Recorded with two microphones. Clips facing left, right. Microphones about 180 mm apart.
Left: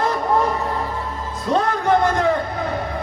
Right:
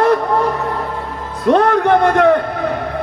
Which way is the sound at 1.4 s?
65° right (ahead or behind).